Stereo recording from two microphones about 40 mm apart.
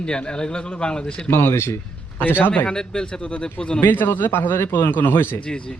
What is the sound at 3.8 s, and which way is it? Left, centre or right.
Speech, left.